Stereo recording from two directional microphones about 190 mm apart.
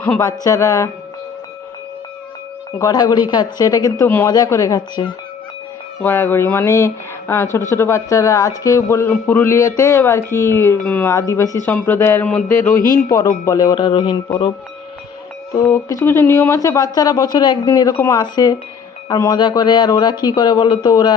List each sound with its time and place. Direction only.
0.0 s speech: 10° left (ahead or behind)
2.7 s speech: 20° left (ahead or behind)
15.7 s speech: 15° left (ahead or behind)